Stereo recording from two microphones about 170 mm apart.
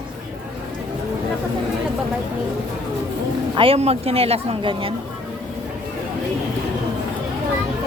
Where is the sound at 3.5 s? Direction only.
35° right (ahead or behind).